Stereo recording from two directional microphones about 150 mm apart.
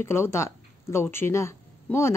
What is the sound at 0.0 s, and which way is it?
A woman's voice, 15° left (ahead or behind).